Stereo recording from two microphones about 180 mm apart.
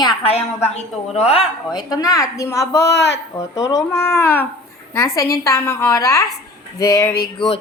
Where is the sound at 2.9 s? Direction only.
75° left (ahead or behind).